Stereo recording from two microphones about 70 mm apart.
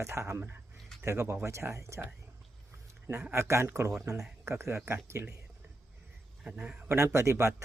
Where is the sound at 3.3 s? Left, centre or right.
Right.